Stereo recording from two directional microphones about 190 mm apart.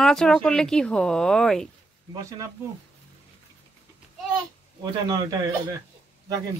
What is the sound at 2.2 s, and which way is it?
Speech, 15° right (ahead or behind).